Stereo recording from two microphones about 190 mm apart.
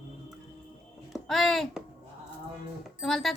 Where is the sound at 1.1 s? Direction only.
Centre (ahead or behind).